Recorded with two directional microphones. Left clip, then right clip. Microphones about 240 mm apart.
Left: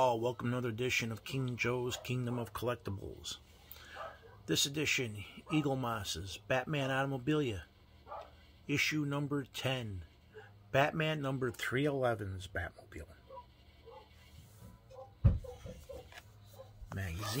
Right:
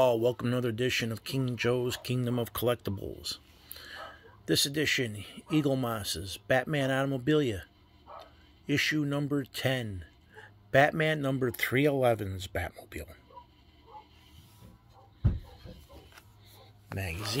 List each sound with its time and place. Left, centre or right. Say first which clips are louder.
0.0 s speech: right 6 dB; right
4.5 s speech: right 5 dB; right
8.6 s speech: right 5 dB; right